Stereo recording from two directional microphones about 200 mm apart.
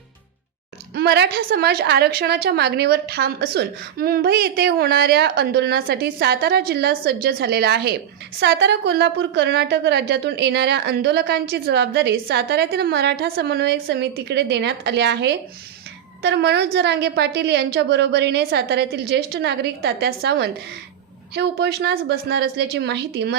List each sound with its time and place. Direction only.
0.9 s a woman's voice: 55° right (ahead or behind)